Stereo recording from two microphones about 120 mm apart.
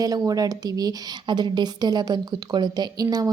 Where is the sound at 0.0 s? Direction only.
30° right (ahead or behind).